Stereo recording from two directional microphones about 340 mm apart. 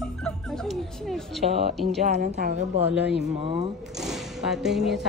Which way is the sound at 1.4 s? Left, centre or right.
Right.